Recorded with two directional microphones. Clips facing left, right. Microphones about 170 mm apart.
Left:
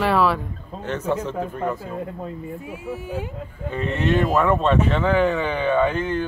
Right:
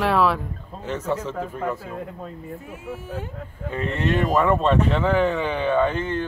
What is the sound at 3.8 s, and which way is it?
Speech, centre (ahead or behind).